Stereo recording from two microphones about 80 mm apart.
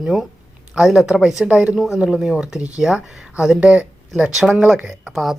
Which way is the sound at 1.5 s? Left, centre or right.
Centre.